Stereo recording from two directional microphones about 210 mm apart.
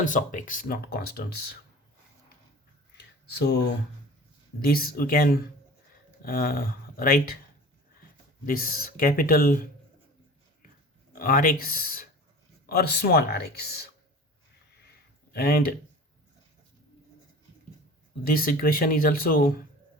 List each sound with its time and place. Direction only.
0.0 s speech: 40° left (ahead or behind)
3.2 s speech: 50° left (ahead or behind)
8.4 s speech: 45° left (ahead or behind)
11.1 s speech: 45° left (ahead or behind)
15.3 s speech: 45° left (ahead or behind)
18.2 s speech: 45° left (ahead or behind)